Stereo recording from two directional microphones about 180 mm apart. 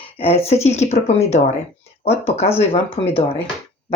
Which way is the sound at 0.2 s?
35° left (ahead or behind).